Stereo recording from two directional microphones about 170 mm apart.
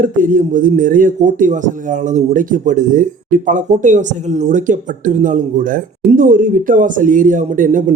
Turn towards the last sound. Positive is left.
turn(degrees=-50)  # may be behind; listen again after turning